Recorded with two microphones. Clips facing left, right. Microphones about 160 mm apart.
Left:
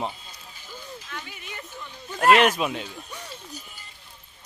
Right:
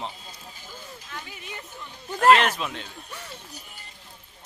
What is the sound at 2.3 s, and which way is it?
Speech, 15° left (ahead or behind).